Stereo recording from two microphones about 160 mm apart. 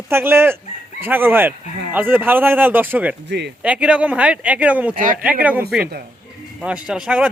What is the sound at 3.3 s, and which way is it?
Speech, 90° right.